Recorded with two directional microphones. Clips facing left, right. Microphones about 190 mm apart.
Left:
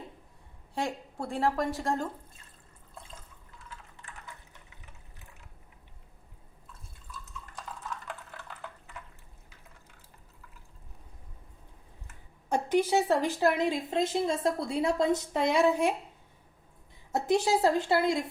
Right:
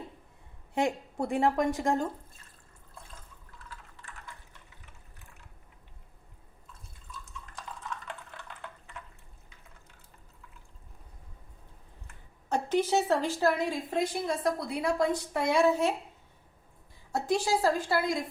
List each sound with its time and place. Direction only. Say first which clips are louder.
0.7 s a woman's voice: right 4 dB; 20° right (ahead or behind)
7.5 s a sound: even; 5° left (ahead or behind)
12.0 s speech: left 1 dB; 10° left (ahead or behind)
17.1 s a woman's voice: left 2 dB; 20° left (ahead or behind)